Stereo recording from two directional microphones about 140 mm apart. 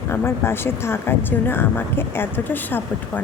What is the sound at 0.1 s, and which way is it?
Speech, 15° left (ahead or behind).